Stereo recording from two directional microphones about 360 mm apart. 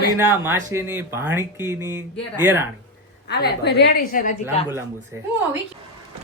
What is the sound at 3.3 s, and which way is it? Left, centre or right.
A woman's voice, left.